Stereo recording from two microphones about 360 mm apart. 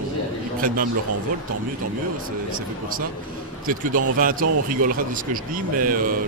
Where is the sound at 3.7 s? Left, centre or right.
Right.